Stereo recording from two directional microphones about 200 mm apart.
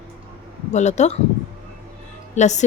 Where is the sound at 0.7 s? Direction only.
35° left (ahead or behind).